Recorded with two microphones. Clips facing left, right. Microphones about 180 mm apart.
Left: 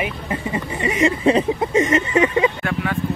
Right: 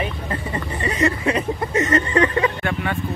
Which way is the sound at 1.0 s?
25° left (ahead or behind).